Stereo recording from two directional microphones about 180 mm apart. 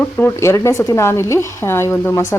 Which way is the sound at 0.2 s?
15° left (ahead or behind).